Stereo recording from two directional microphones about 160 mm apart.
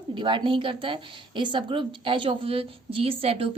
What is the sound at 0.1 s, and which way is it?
A woman's voice, 30° right (ahead or behind).